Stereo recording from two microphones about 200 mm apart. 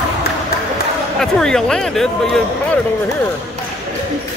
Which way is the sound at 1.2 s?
5° left (ahead or behind).